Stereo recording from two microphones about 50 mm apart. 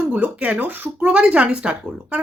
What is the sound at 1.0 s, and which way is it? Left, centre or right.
Speech, right.